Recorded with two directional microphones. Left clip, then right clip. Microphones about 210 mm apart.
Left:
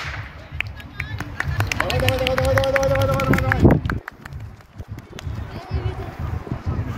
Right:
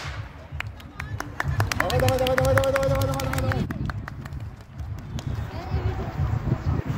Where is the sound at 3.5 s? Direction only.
20° right (ahead or behind).